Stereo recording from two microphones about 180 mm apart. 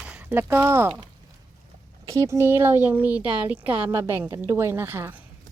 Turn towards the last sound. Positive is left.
turn(degrees=-15)  # may be behind; listen again after turning